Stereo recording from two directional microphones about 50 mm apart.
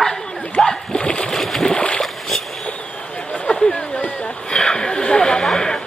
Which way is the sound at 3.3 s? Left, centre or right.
Centre.